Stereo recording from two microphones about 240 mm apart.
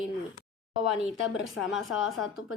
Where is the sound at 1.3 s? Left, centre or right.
Left.